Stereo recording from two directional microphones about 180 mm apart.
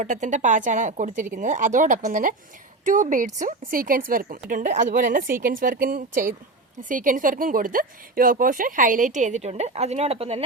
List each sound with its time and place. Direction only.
0.0 s speech: 45° right (ahead or behind)